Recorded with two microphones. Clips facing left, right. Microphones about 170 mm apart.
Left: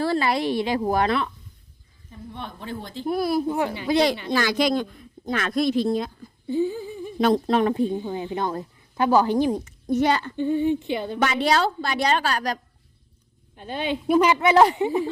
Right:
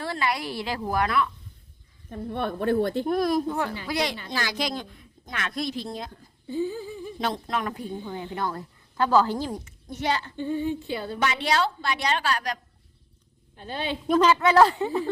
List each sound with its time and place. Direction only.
0.0 s a woman's voice: 30° left (ahead or behind)
2.0 s a woman's voice: 60° right (ahead or behind)
3.1 s a woman's voice: 5° left (ahead or behind)
4.3 s speech: 55° left (ahead or behind)
4.9 s speech: 35° left (ahead or behind)
5.6 s speech: 60° left (ahead or behind)
6.5 s a woman's voice: 15° left (ahead or behind)
7.3 s a woman's voice: 30° left (ahead or behind)
9.9 s a child's voice: 50° left (ahead or behind)
10.3 s a woman's voice: 15° left (ahead or behind)
11.2 s a woman's voice: 45° left (ahead or behind)
13.6 s a woman's voice: 15° left (ahead or behind)